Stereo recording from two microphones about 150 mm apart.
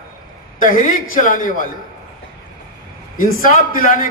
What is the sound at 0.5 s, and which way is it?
A man's voice, 60° left (ahead or behind).